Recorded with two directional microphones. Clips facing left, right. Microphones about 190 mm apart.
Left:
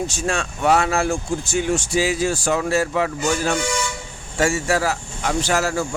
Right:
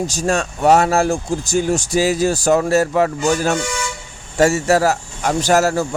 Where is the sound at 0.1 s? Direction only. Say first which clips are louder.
Right 5 dB; 40° right (ahead or behind).